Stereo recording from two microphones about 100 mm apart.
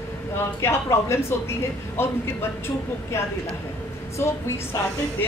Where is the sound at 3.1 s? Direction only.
25° left (ahead or behind).